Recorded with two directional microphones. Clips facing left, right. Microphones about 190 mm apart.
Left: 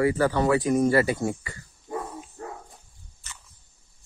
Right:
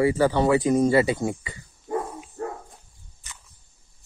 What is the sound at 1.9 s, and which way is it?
Dog, 75° right (ahead or behind).